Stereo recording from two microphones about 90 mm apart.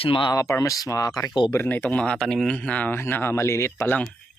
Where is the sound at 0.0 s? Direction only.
80° left.